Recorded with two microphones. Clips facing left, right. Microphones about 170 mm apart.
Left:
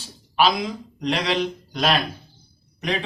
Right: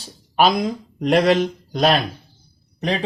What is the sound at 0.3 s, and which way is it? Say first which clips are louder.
Speech: right 3 dB; 50° right (ahead or behind).